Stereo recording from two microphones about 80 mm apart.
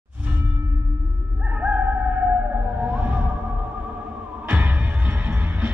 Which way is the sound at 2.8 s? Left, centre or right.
Centre.